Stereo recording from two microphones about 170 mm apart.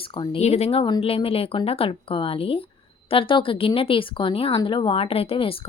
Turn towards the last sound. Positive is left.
turn(degrees=35)  # may be behind; listen again after turning